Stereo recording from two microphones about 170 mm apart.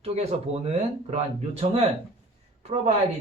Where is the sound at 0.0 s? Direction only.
40° right (ahead or behind).